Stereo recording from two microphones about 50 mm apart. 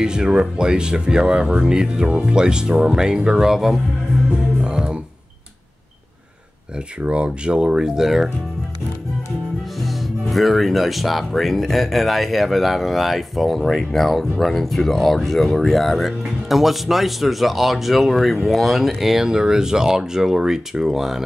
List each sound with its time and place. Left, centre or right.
0.0 s speech: centre
4.6 s music: centre
7.0 s speech: right; by 8.3 s centre
9.8 s speech: centre